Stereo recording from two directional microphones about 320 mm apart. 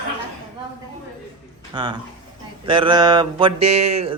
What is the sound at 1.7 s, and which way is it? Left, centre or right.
Mantra, centre.